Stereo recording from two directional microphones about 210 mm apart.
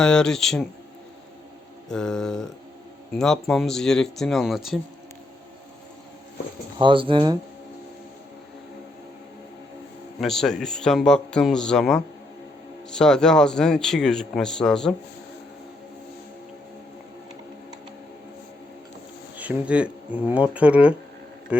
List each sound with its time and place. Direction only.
0.0 s a man's voice: 5° left (ahead or behind)
1.9 s a man's voice: 5° left (ahead or behind)
6.7 s speech: 25° right (ahead or behind)
10.2 s a man's voice: centre (ahead or behind)
19.4 s speech: 5° right (ahead or behind)